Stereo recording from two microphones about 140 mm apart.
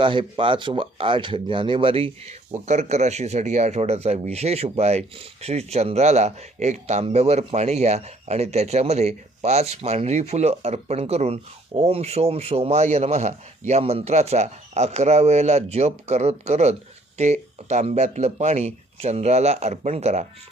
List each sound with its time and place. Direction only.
0.0 s speech: 40° right (ahead or behind)